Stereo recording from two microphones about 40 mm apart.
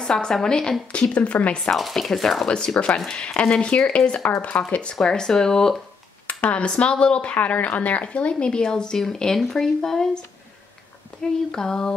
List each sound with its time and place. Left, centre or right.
0.0 s speech: centre
0.9 s a woman's voice: left
1.7 s speech: centre
2.4 s a woman's voice: left
5.0 s speech: centre
6.2 s a sound: left
6.8 s a woman's voice: left
8.0 s speech: left; by 10.0 s centre
11.5 s speech: centre